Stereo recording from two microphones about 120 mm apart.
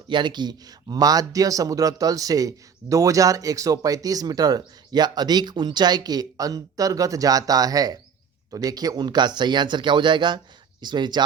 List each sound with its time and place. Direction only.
0.1 s a man's voice: 40° right (ahead or behind)